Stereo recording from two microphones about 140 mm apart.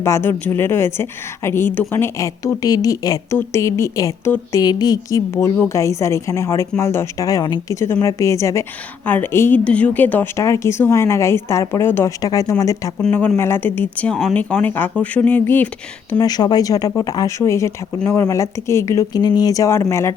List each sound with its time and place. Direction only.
0.0 s a woman's voice: 20° left (ahead or behind)
13.0 s speech: 10° left (ahead or behind)
16.1 s a woman's voice: 30° left (ahead or behind)